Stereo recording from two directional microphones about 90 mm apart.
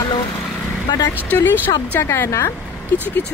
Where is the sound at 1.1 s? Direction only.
20° left (ahead or behind).